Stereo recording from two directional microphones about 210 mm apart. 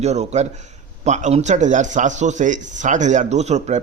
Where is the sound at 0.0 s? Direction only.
30° right (ahead or behind).